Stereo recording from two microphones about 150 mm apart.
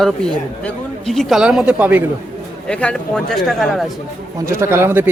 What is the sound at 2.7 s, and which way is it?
Speech, 5° left (ahead or behind).